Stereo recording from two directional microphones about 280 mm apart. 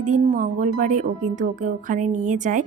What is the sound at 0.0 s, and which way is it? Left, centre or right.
Speech, right.